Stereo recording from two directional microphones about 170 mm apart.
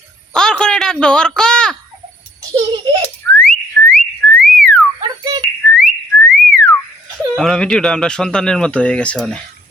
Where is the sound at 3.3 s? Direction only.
10° left (ahead or behind).